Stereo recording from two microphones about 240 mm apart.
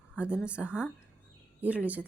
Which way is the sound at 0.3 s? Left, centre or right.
Centre.